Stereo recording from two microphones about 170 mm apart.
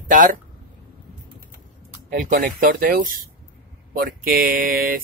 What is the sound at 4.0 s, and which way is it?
Speech, 60° right (ahead or behind).